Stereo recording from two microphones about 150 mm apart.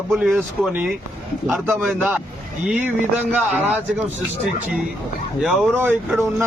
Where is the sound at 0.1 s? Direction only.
Centre (ahead or behind).